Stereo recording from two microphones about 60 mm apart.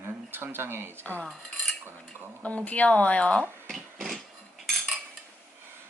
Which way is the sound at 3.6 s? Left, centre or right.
Centre.